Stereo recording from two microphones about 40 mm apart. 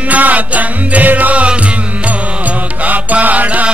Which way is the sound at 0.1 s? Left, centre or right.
Right.